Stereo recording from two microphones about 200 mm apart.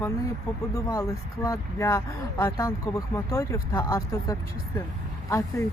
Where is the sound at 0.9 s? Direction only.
15° left (ahead or behind).